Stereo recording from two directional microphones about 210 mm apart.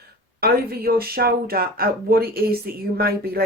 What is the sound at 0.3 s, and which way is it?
Speech, 45° right (ahead or behind).